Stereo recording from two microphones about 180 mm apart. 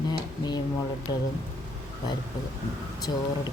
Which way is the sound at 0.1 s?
25° left (ahead or behind).